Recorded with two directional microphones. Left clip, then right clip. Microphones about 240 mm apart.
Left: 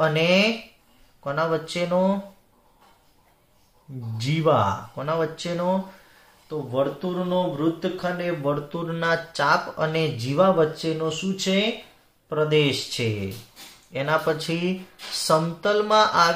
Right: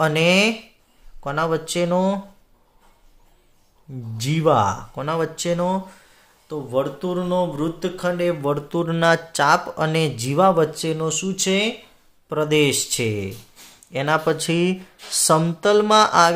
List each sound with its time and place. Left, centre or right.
0.0 s speech: right
4.2 s speech: right